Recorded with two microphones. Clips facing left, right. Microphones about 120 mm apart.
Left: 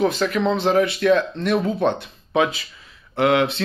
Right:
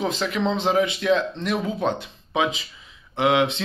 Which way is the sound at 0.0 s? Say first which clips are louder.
Left 4 dB; 20° right (ahead or behind).